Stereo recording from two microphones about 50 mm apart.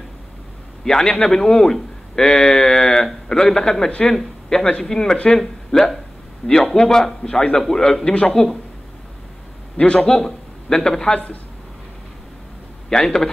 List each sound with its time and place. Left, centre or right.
0.8 s a man's voice: centre
5.4 s a man's voice: centre
8.1 s speech: left
9.9 s speech: centre
12.9 s a man's voice: centre